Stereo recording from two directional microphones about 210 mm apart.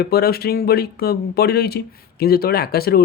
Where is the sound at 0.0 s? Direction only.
45° left (ahead or behind).